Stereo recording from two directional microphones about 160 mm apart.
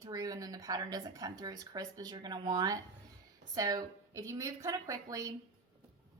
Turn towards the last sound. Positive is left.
turn(degrees=-20)  # may be behind; listen again after turning